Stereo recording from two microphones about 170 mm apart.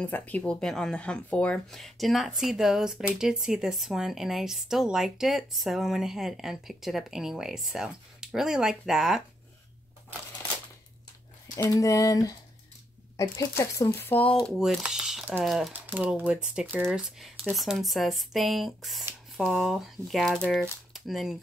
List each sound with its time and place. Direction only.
0.0 s speech: 10° left (ahead or behind)
11.5 s speech: 20° left (ahead or behind)
14.4 s speech: centre (ahead or behind)